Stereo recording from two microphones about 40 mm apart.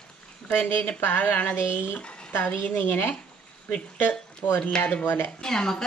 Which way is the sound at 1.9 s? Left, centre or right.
Left.